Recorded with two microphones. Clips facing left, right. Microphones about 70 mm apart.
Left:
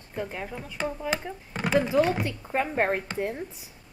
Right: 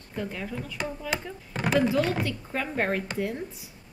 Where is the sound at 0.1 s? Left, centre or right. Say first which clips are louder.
Even; left.